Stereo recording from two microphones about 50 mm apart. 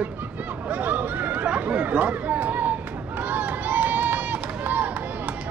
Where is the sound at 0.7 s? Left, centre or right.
Right.